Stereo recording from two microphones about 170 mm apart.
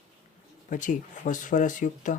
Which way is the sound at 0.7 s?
50° left (ahead or behind).